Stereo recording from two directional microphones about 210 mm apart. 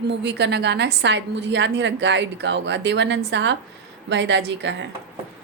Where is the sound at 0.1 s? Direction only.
55° right (ahead or behind).